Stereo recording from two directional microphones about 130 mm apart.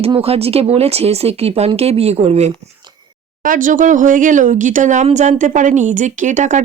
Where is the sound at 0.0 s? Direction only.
50° right (ahead or behind).